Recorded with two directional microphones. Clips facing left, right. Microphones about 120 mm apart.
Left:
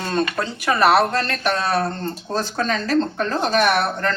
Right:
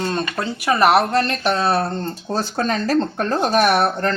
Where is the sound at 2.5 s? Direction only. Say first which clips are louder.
Right 1 dB; 40° right (ahead or behind).